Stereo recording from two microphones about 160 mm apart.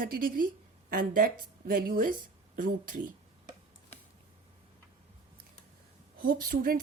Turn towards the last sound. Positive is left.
turn(degrees=-60)  # may be behind; listen again after turning